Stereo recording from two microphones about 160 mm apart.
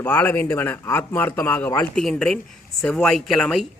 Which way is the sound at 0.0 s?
10° left (ahead or behind).